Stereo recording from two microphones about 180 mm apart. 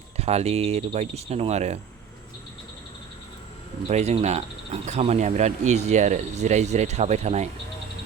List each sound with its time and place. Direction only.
0.2 s speech: 35° right (ahead or behind)
3.8 s speech: 40° right (ahead or behind)